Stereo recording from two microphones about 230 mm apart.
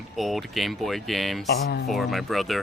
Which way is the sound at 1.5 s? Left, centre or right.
Left.